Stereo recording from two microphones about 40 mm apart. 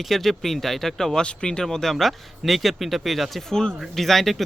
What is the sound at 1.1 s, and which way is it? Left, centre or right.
Speech, left.